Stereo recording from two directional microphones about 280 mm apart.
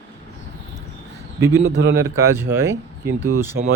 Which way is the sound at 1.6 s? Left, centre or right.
Right.